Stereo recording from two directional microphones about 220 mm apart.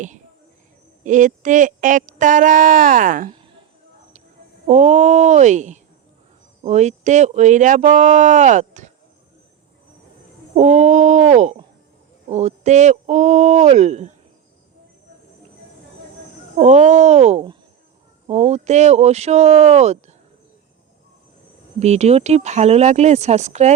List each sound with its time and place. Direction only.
1.0 s speech: 35° right (ahead or behind)
4.6 s speech: 35° right (ahead or behind)
10.5 s speech: 35° right (ahead or behind)
16.6 s speech: 30° right (ahead or behind)
21.8 s speech: 30° right (ahead or behind)